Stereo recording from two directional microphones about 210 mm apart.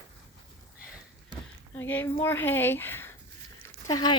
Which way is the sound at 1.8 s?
10° left (ahead or behind).